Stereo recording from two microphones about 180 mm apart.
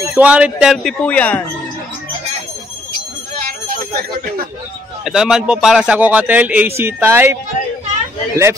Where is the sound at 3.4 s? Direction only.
55° right (ahead or behind).